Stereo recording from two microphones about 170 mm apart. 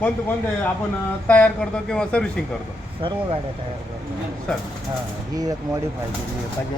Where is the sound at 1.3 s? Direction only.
10° left (ahead or behind).